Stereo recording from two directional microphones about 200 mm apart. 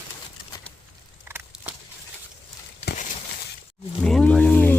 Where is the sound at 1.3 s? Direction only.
10° right (ahead or behind).